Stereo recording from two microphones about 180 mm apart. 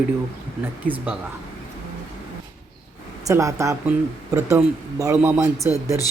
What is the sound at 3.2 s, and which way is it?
Speech, 15° right (ahead or behind).